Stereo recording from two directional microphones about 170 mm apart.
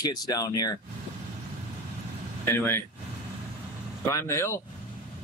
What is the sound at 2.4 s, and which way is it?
Speech, 15° left (ahead or behind).